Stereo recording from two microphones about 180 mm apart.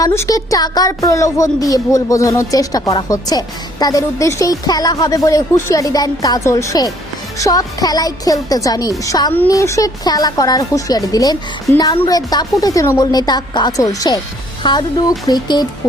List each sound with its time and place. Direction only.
0.0 s a woman's voice: 15° left (ahead or behind)